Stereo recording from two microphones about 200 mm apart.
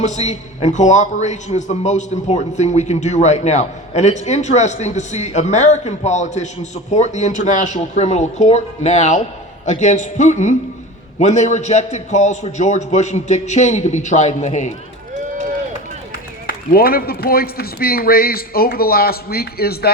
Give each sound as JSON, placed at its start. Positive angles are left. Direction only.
{"t": 0.0, "sound": "a man's voice", "side_deg": 35}
{"t": 16.5, "sound": "a man's voice", "side_deg": 50}